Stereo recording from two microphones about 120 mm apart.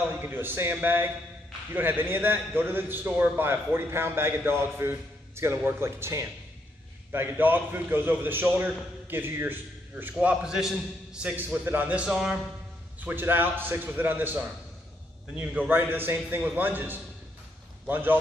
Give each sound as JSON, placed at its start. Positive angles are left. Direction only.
{"t": 0.1, "sound": "a man's voice", "side_deg": -20}
{"t": 10.1, "sound": "a man's voice", "side_deg": -5}
{"t": 11.6, "sound": "a man's voice", "side_deg": -15}
{"t": 13.0, "sound": "a man's voice", "side_deg": -15}